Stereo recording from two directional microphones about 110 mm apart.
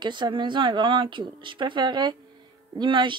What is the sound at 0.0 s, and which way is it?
Speech, 45° right (ahead or behind).